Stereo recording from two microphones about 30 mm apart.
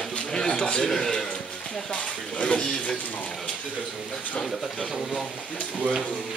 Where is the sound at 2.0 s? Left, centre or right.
Left.